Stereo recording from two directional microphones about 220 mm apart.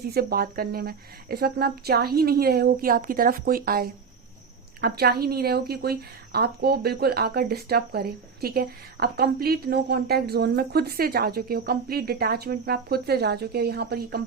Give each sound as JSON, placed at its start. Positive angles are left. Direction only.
{"t": 0.0, "sound": "a woman's voice", "side_deg": -45}